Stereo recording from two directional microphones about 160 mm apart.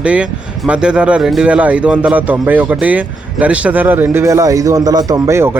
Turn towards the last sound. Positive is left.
turn(degrees=-15)  # may be behind; listen again after turning